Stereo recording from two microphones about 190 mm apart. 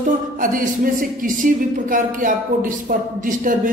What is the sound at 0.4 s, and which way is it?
Speech, 45° right (ahead or behind).